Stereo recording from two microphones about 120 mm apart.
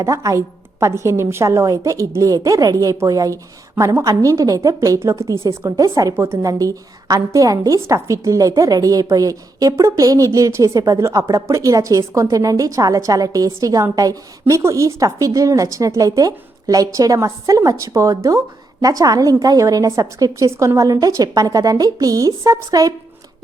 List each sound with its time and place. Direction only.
0.0 s a woman's voice: 30° right (ahead or behind)